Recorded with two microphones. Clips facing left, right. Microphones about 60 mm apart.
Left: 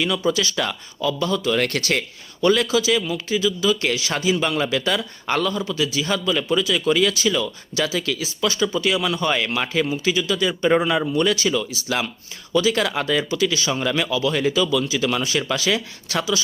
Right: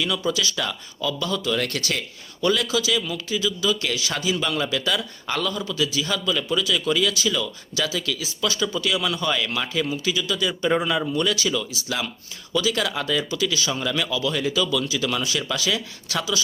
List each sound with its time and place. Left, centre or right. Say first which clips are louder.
0.0 s a man's voice: left 3 dB; left
1.6 s a man's voice: left 5 dB; left
9.8 s speech: left 3 dB; left
10.1 s a man's voice: left 4 dB; left
11.2 s a man's voice: left 3 dB; left